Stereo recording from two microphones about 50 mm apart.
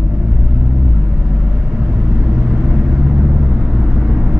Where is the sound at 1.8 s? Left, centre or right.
Centre.